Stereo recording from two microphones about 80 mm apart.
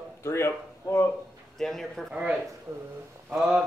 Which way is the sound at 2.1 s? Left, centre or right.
Centre.